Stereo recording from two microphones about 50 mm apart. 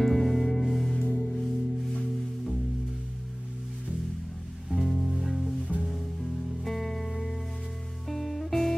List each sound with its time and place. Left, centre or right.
0.0 s music: centre
0.9 s music: centre
1.2 s music: centre
4.6 s music: centre
5.7 s music: right
6.6 s music: centre